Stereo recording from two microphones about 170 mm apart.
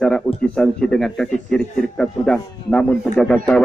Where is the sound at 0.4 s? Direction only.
5° left (ahead or behind).